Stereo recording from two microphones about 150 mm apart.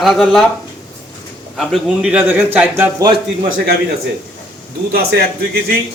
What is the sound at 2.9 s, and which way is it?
Speech, 30° right (ahead or behind).